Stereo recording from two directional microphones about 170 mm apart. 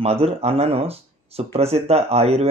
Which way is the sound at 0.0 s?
35° right (ahead or behind).